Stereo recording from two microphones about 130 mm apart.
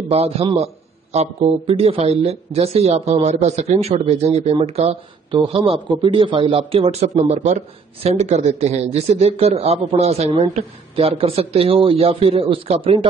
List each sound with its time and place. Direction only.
0.1 s speech: 50° right (ahead or behind)
1.4 s speech: 40° right (ahead or behind)